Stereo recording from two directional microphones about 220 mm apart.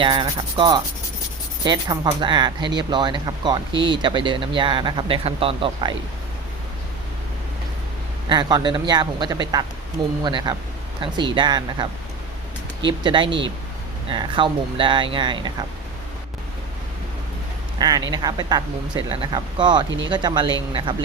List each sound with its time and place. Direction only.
0.0 s speech: 20° right (ahead or behind)
8.3 s speech: 20° right (ahead or behind)
13.0 s speech: 20° right (ahead or behind)
17.7 s a man's voice: 20° right (ahead or behind)